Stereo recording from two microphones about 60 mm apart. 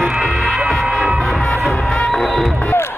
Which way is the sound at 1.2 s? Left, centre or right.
Centre.